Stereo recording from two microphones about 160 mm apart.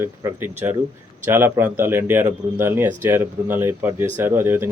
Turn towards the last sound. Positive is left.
turn(degrees=-15)  # may be behind; listen again after turning